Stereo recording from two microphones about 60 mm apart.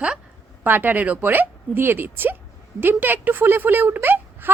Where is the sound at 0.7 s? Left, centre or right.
Right.